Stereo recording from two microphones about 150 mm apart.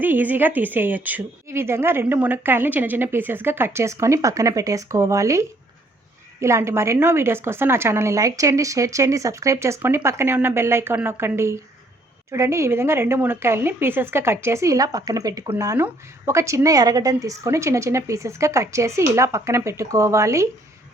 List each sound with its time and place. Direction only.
0.0 s a woman's voice: 10° right (ahead or behind)